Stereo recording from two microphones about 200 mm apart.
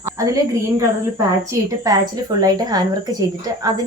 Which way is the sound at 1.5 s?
15° right (ahead or behind).